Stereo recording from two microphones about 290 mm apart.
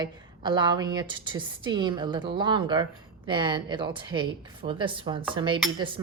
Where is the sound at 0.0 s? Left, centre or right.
Centre.